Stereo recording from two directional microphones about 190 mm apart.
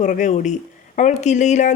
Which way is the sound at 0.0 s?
40° left (ahead or behind).